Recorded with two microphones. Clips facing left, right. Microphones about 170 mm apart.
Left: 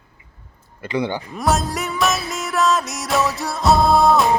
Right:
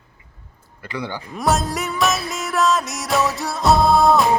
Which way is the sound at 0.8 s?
20° left (ahead or behind).